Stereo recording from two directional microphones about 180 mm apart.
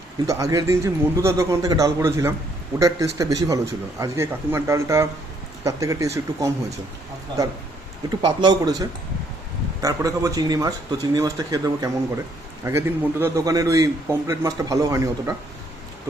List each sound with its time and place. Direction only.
0.3 s a man's voice: 20° right (ahead or behind)
8.2 s a man's voice: 25° right (ahead or behind)